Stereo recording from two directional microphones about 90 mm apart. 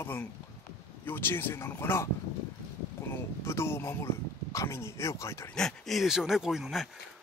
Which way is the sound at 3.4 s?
30° left (ahead or behind).